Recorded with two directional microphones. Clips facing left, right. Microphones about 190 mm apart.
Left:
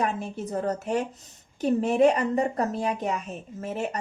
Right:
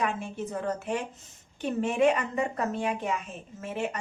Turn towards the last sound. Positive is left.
turn(degrees=40)  # may be behind; listen again after turning